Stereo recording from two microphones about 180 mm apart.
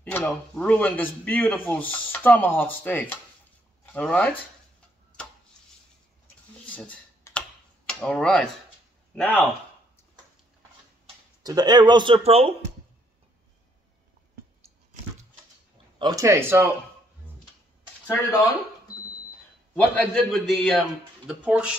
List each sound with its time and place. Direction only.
0.0 s speech: 10° left (ahead or behind)
6.6 s computer keyboard: 5° left (ahead or behind)
9.1 s speech: 10° left (ahead or behind)
11.4 s speech: 20° right (ahead or behind)
16.0 s speech: 20° right (ahead or behind)
20.0 s a man's voice: centre (ahead or behind)